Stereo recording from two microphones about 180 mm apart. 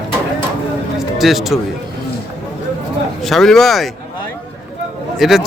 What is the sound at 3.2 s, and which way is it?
Speech, centre (ahead or behind).